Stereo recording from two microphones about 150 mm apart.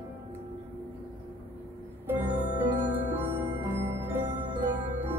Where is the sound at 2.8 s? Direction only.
15° right (ahead or behind).